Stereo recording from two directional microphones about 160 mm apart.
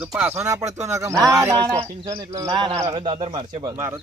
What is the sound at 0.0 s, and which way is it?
Speech, 5° right (ahead or behind).